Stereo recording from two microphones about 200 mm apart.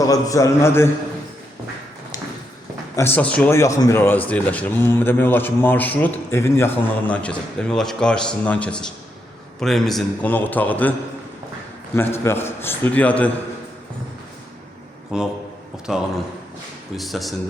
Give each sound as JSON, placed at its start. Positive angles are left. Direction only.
{"t": 0.0, "sound": "a man's voice", "side_deg": 15}
{"t": 2.9, "sound": "a man's voice", "side_deg": 10}
{"t": 11.9, "sound": "a man's voice", "side_deg": 10}
{"t": 15.1, "sound": "speech", "side_deg": -5}